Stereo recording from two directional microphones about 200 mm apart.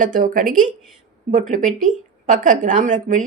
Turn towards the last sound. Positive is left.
turn(degrees=-40)  # may be behind; listen again after turning